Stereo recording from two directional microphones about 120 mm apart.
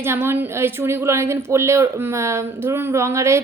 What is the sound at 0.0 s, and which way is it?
A woman's voice, 20° right (ahead or behind).